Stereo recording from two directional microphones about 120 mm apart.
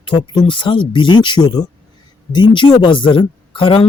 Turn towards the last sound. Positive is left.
turn(degrees=45)  # may be behind; listen again after turning